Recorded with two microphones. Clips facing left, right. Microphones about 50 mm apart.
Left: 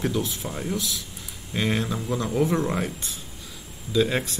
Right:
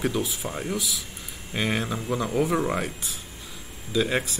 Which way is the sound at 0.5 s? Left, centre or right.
Centre.